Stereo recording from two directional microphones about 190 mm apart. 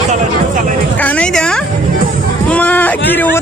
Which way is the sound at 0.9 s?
5° left (ahead or behind).